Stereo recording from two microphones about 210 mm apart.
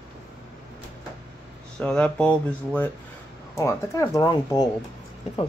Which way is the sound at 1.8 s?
5° left (ahead or behind).